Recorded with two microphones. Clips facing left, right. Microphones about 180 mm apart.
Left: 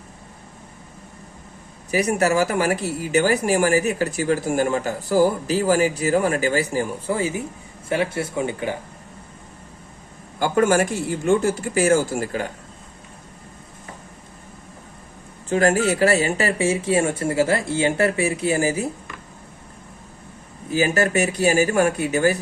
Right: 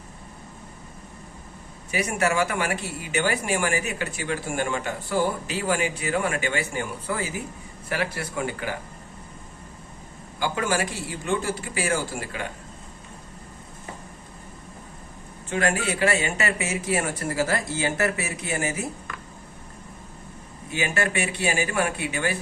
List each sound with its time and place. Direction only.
1.9 s speech: 40° left (ahead or behind)
10.4 s speech: 50° left (ahead or behind)
15.4 s speech: 40° left (ahead or behind)
20.7 s speech: 40° left (ahead or behind)